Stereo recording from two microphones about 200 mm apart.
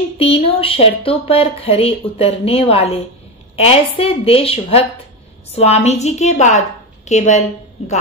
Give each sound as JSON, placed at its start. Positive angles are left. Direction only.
{"t": 0.2, "sound": "a woman's voice", "side_deg": 30}